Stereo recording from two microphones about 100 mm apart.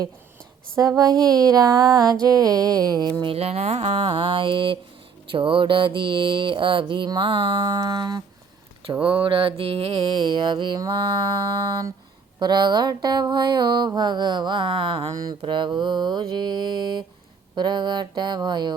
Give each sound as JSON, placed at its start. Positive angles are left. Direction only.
{"t": 0.8, "sound": "music", "side_deg": -40}
{"t": 3.3, "sound": "mantra", "side_deg": -90}
{"t": 9.0, "sound": "mantra", "side_deg": -60}
{"t": 10.8, "sound": "music", "side_deg": -40}
{"t": 12.4, "sound": "mantra", "side_deg": -45}
{"t": 15.1, "sound": "music", "side_deg": -40}
{"t": 15.4, "sound": "mantra", "side_deg": -55}